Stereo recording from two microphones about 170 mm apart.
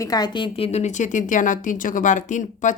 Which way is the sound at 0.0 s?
20° left (ahead or behind).